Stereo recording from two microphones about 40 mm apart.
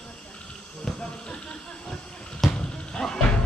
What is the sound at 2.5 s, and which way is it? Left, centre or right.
Music, left.